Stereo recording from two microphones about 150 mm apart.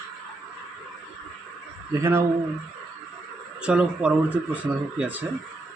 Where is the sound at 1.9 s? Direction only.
20° right (ahead or behind).